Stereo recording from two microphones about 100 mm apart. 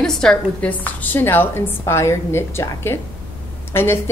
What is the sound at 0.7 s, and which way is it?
A woman's voice, 15° left (ahead or behind).